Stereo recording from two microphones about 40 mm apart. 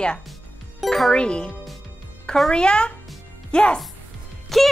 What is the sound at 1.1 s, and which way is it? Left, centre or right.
Speech, left.